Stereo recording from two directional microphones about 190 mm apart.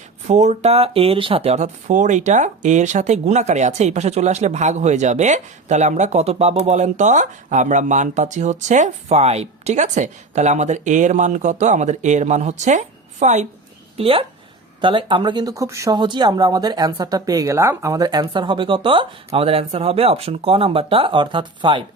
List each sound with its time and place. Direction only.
0.3 s speech: 40° right (ahead or behind)